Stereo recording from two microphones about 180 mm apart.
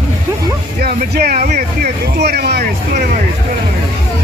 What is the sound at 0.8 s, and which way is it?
Speech, 55° right (ahead or behind).